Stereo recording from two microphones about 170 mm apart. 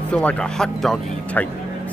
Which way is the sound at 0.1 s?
10° left (ahead or behind).